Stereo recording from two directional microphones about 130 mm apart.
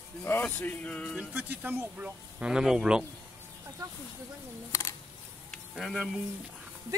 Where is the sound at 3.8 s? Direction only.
25° right (ahead or behind).